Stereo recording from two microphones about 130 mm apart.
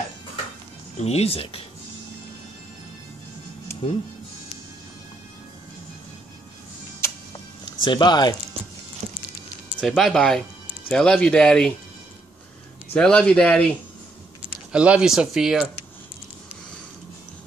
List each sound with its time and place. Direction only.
0.9 s speech: 55° left (ahead or behind)
3.8 s speech: 50° left (ahead or behind)
7.8 s speech: 35° left (ahead or behind)
9.0 s a sound: 60° right (ahead or behind)
9.8 s speech: centre (ahead or behind)
12.9 s speech: 10° left (ahead or behind)
14.7 s speech: 10° right (ahead or behind)